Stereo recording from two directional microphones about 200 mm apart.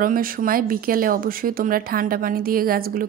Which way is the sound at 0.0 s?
45° right (ahead or behind).